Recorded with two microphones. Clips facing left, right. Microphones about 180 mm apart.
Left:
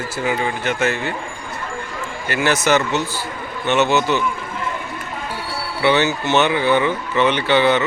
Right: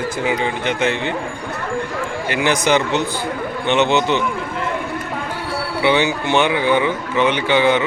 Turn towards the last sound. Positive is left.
turn(degrees=-10)  # may be behind; listen again after turning